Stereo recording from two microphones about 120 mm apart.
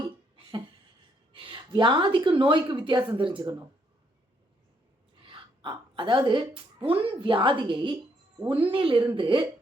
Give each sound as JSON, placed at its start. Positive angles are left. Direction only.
{"t": 1.3, "sound": "a woman's voice", "side_deg": -45}
{"t": 5.2, "sound": "a woman's voice", "side_deg": -45}